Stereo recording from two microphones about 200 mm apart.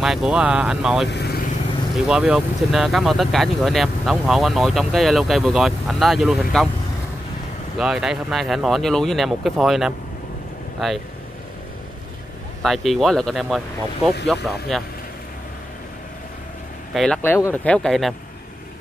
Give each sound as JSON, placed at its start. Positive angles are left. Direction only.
{"t": 0.0, "sound": "speech", "side_deg": 0}
{"t": 1.1, "sound": "vehicle", "side_deg": 50}
{"t": 2.0, "sound": "speech", "side_deg": -5}
{"t": 7.7, "sound": "speech", "side_deg": -5}
{"t": 12.6, "sound": "speech", "side_deg": 0}
{"t": 16.9, "sound": "speech", "side_deg": 5}